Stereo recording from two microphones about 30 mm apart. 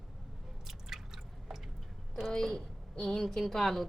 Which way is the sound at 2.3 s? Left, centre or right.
Centre.